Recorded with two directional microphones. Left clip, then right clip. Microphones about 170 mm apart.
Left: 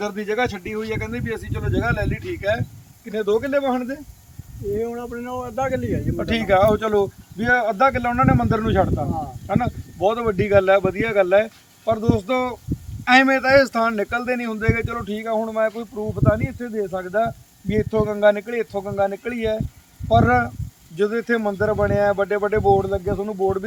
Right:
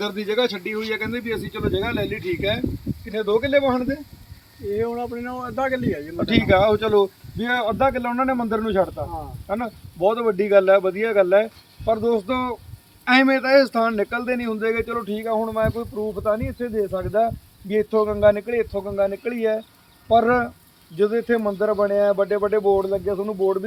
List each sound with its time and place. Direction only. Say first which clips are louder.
0.0 s speech: right 1 dB; 5° right (ahead or behind)
4.8 s speech: right 2 dB; 60° left (ahead or behind)
5.5 s speech: even; 50° left (ahead or behind)
6.1 s speech: even; centre (ahead or behind)